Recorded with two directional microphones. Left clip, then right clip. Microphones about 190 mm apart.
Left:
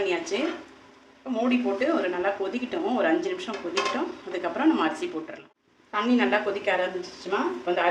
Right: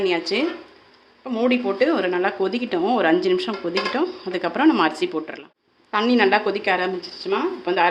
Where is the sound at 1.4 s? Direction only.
65° right (ahead or behind).